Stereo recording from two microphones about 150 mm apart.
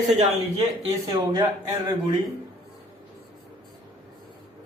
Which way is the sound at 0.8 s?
30° right (ahead or behind).